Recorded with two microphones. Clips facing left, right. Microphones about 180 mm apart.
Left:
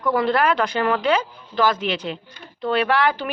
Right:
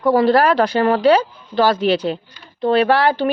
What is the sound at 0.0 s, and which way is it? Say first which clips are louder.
Speech: right 6 dB; 30° right (ahead or behind).